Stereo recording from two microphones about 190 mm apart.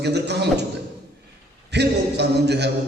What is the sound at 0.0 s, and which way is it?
Speech, 60° right (ahead or behind).